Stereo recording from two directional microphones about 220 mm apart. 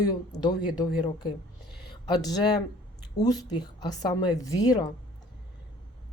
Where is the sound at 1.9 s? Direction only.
20° left (ahead or behind).